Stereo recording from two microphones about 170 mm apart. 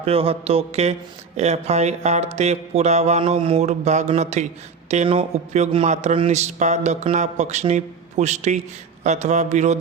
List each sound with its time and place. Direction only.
0.0 s mantra: 35° right (ahead or behind)